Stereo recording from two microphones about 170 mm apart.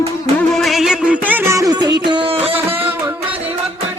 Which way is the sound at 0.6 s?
Centre (ahead or behind).